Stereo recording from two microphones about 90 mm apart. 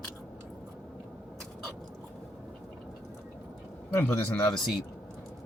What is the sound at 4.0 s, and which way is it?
Speech, 25° left (ahead or behind).